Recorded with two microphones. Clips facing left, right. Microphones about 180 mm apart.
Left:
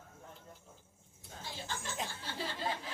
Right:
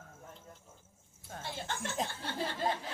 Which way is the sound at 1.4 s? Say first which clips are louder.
Right 4 dB; 65° right (ahead or behind).